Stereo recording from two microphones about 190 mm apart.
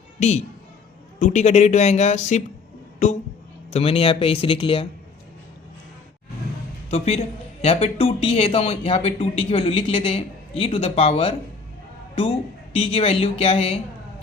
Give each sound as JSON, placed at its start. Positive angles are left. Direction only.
{"t": 0.2, "sound": "a man's voice", "side_deg": 35}
{"t": 6.9, "sound": "a man's voice", "side_deg": 35}
{"t": 12.7, "sound": "a man's voice", "side_deg": 30}